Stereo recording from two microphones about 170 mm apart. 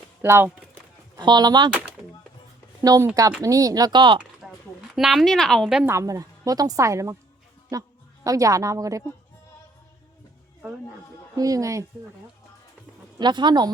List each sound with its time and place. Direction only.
0.2 s a sound: 10° right (ahead or behind)
1.2 s speech: 25° right (ahead or behind)
2.8 s speech: 20° right (ahead or behind)
4.4 s a sound: centre (ahead or behind)
4.9 s a woman's voice: centre (ahead or behind)
5.9 s a woman's voice: 20° right (ahead or behind)
10.6 s speech: 5° right (ahead or behind)
11.3 s speech: 20° right (ahead or behind)
13.1 s speech: 25° right (ahead or behind)